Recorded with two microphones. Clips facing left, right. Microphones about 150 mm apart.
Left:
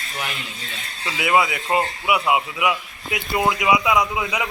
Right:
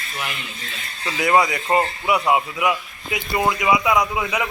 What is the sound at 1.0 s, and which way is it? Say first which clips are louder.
A man's voice: right 2 dB; 5° left (ahead or behind).